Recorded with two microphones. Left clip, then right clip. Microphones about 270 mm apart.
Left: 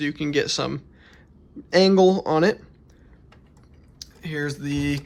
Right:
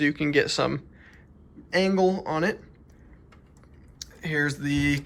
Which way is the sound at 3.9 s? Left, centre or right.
Centre.